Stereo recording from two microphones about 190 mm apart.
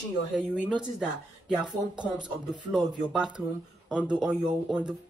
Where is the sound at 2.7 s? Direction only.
5° right (ahead or behind).